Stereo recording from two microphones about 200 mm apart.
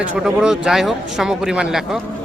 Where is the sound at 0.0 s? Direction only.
5° right (ahead or behind).